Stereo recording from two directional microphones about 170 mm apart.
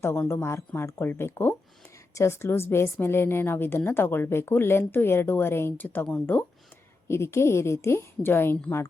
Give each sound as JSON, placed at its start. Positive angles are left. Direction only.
{"t": 0.0, "sound": "a woman's voice", "side_deg": 15}